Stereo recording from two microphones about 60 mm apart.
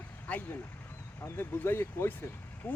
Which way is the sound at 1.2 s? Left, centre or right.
Left.